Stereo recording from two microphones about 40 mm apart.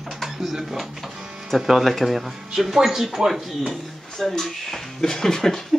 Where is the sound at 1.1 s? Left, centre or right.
Right.